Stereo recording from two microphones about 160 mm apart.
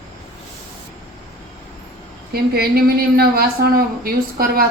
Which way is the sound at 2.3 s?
75° right (ahead or behind).